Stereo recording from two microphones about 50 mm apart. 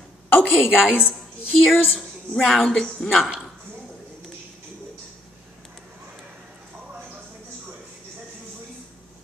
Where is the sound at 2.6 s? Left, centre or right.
Centre.